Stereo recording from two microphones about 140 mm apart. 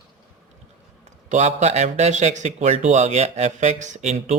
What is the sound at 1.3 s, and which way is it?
Speech, 55° right (ahead or behind).